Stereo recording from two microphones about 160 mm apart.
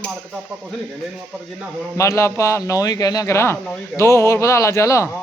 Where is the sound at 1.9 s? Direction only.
20° left (ahead or behind).